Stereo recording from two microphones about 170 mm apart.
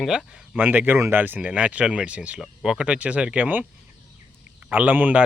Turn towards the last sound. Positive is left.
turn(degrees=-10)  # may be behind; listen again after turning